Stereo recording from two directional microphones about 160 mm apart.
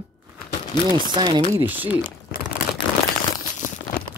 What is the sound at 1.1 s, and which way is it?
Speech, 30° right (ahead or behind).